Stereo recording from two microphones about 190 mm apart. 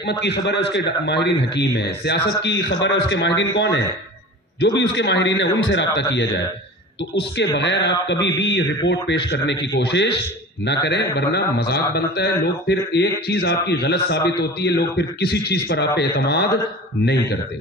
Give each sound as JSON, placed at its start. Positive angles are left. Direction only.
{"t": 0.0, "sound": "a man's voice", "side_deg": 60}
{"t": 7.8, "sound": "a man's voice", "side_deg": 65}